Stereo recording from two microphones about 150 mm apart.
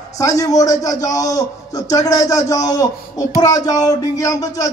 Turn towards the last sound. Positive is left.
turn(degrees=20)  # may be behind; listen again after turning